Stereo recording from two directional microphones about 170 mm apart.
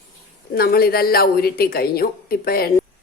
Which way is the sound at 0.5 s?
60° left (ahead or behind).